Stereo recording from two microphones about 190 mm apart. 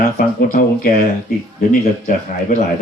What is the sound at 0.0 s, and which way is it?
Speech, 45° left (ahead or behind).